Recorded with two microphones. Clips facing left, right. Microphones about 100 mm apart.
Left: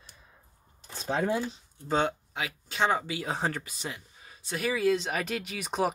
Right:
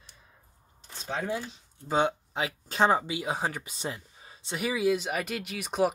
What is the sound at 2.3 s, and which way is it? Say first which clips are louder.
Speech: right 4 dB; 35° right (ahead or behind).